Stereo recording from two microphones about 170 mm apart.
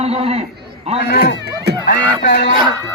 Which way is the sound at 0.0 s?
35° right (ahead or behind).